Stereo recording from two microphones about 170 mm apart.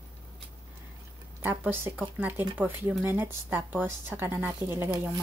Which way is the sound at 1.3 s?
10° right (ahead or behind).